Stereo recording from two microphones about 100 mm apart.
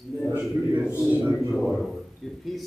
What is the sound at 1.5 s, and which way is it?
Speech, centre (ahead or behind).